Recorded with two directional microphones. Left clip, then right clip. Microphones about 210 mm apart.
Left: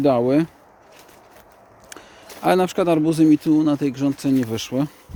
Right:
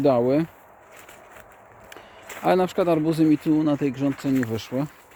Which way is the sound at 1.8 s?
10° left (ahead or behind).